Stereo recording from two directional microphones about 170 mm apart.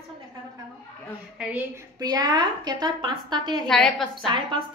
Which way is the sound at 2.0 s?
25° right (ahead or behind).